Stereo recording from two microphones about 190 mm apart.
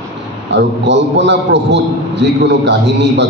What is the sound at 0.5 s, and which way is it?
A man's voice, 70° right (ahead or behind).